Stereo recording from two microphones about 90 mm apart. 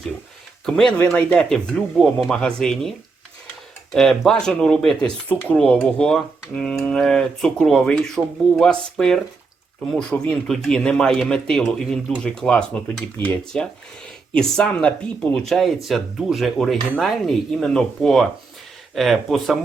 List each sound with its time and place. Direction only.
0.6 s speech: 5° left (ahead or behind)
3.9 s speech: 5° left (ahead or behind)
14.3 s speech: 10° left (ahead or behind)
15.4 s speech: centre (ahead or behind)